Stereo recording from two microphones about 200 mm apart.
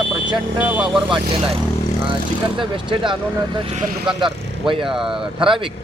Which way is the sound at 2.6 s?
25° right (ahead or behind).